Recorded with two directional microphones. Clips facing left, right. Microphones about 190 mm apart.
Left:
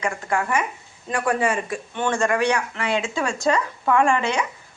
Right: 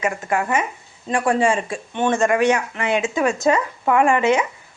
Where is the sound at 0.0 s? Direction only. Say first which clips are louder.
Right 3 dB; 20° right (ahead or behind).